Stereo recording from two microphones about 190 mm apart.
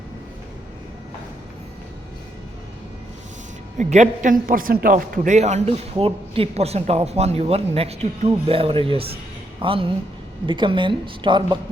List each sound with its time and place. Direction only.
3.8 s a man's voice: 40° right (ahead or behind)